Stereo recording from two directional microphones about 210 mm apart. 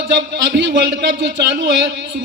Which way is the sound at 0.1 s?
55° right (ahead or behind).